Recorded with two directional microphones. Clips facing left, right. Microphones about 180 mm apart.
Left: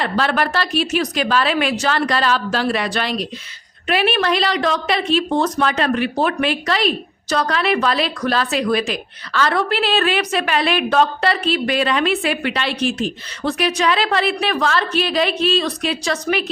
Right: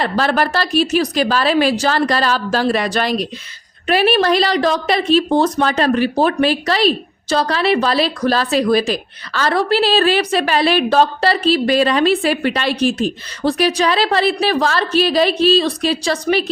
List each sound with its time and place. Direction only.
0.0 s a woman's voice: 40° right (ahead or behind)